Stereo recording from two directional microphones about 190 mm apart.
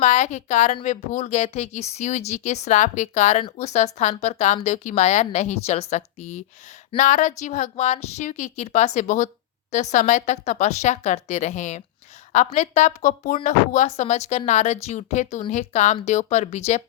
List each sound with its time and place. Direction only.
0.0 s speech: 40° left (ahead or behind)